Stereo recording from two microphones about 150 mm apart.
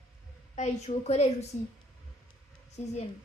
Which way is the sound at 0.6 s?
50° left (ahead or behind).